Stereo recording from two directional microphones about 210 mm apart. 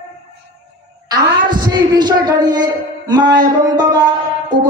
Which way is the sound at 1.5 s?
20° right (ahead or behind).